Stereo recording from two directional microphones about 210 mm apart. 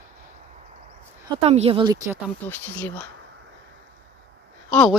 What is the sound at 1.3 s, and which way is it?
Speech, 30° right (ahead or behind).